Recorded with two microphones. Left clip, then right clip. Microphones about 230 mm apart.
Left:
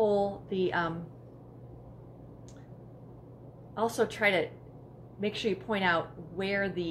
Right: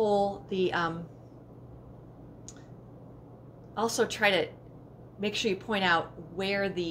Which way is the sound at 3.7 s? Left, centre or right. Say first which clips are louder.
Right 1 dB; centre.